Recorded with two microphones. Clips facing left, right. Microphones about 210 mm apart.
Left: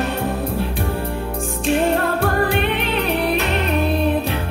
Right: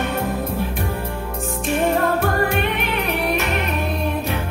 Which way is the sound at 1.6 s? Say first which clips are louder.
Left 1 dB; 30° left (ahead or behind).